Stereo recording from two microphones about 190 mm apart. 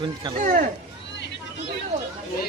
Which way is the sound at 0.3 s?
45° right (ahead or behind).